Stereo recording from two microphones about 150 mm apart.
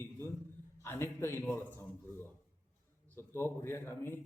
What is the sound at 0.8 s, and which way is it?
Speech, 15° left (ahead or behind).